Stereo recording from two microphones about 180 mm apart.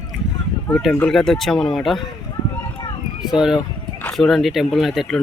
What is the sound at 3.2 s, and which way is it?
Speech, 5° right (ahead or behind).